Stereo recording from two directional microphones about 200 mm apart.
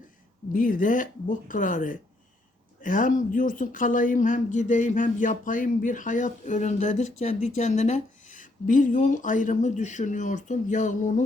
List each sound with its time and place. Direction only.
0.5 s speech: 45° left (ahead or behind)